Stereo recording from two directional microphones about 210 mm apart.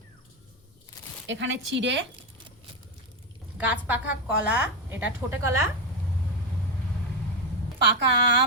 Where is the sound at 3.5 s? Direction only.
5° right (ahead or behind).